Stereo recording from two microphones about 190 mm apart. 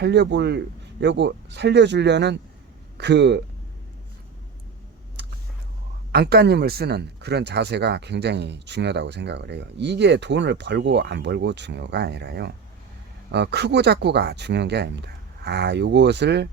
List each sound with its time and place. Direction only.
0.0 s speech: 60° right (ahead or behind)
5.2 s vehicle: 60° right (ahead or behind)
6.1 s speech: 55° right (ahead or behind)